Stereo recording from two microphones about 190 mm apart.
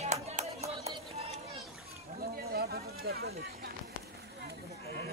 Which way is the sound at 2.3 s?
55° right (ahead or behind).